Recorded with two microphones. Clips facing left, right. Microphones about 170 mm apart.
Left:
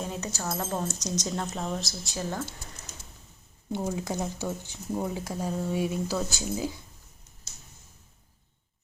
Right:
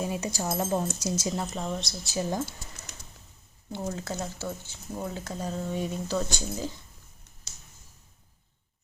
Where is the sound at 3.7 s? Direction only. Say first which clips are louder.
Left 3 dB; 10° left (ahead or behind).